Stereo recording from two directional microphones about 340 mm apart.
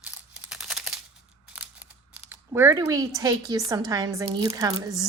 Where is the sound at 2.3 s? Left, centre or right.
Centre.